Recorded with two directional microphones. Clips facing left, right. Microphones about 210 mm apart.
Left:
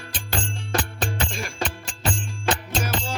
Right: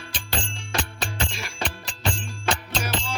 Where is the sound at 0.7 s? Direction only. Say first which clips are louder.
Left 4 dB; 50° left (ahead or behind).